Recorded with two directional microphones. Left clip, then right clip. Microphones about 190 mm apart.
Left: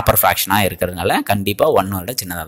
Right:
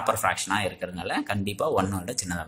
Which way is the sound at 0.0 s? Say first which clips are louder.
Left 10 dB; 45° left (ahead or behind).